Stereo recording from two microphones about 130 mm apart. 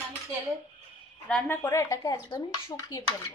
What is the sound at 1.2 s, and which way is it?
Speech, 10° left (ahead or behind).